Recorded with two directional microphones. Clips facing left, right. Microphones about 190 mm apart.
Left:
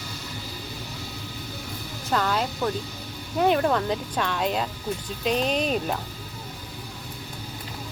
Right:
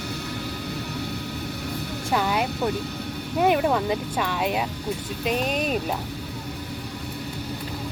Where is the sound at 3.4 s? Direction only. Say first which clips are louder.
Right 1 dB; 10° right (ahead or behind).